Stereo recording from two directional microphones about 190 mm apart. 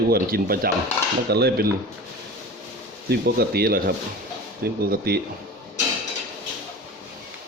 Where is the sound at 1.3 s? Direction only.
60° right (ahead or behind).